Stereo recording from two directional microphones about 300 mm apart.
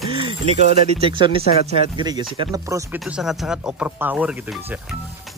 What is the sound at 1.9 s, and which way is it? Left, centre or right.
Speech, centre.